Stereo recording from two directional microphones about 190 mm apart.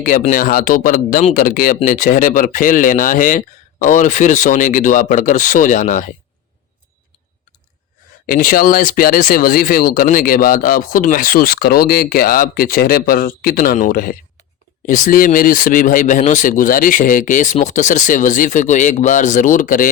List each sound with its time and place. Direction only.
0.0 s speech: 45° left (ahead or behind)
8.3 s speech: 50° left (ahead or behind)